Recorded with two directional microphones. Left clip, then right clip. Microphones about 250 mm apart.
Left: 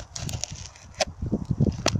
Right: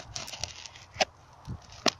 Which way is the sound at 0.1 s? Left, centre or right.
Centre.